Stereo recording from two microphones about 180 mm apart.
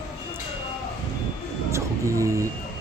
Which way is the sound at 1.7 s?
15° right (ahead or behind).